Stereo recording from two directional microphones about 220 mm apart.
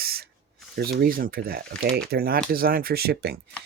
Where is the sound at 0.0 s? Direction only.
45° right (ahead or behind).